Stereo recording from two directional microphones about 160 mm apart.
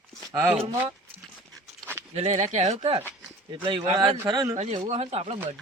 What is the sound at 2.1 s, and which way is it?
Speech, 45° right (ahead or behind).